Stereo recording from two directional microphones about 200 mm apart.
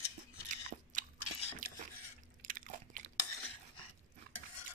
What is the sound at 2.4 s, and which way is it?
Biting, 45° right (ahead or behind).